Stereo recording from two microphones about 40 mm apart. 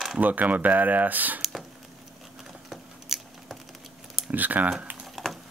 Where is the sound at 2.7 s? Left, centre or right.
Centre.